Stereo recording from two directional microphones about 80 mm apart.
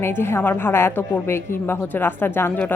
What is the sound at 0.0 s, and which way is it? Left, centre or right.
A woman's voice, left.